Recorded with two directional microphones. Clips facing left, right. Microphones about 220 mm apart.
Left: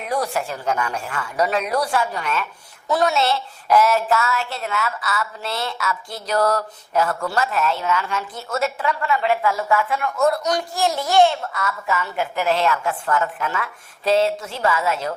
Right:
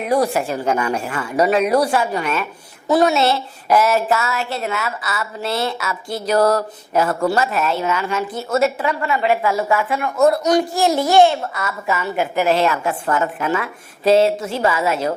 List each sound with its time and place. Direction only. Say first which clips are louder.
0.0 s speech: right 6 dB; 10° right (ahead or behind)
10.2 s a man's voice: right 5 dB; 25° right (ahead or behind)
10.4 s speech: right 6 dB; 5° right (ahead or behind)